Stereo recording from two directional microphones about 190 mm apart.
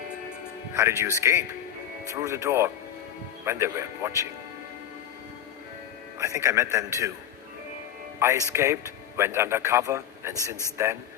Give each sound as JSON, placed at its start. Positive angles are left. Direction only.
{"t": 0.7, "sound": "a man's voice", "side_deg": -10}
{"t": 6.1, "sound": "a man's voice", "side_deg": -15}
{"t": 8.2, "sound": "a man's voice", "side_deg": -15}